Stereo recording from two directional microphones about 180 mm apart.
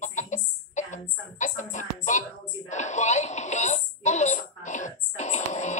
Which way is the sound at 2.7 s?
40° left (ahead or behind).